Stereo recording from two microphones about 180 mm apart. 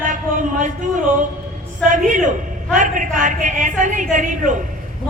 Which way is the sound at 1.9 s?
45° right (ahead or behind).